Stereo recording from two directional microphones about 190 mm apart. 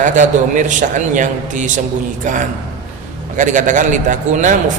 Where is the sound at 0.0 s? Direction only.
40° right (ahead or behind).